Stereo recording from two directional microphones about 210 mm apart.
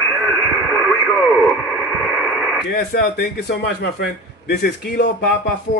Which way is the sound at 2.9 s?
45° left (ahead or behind).